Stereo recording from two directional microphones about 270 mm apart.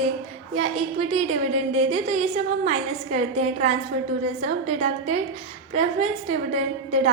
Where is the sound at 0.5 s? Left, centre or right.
Right.